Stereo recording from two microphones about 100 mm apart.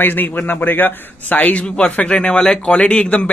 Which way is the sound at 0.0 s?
20° left (ahead or behind).